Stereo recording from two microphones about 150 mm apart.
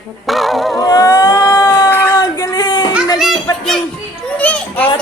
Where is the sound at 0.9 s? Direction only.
25° left (ahead or behind).